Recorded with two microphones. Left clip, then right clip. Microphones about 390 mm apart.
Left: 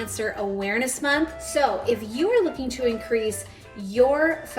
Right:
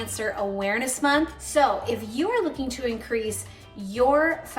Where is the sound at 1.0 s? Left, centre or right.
Centre.